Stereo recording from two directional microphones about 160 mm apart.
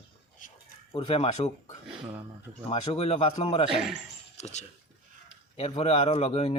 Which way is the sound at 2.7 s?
35° left (ahead or behind).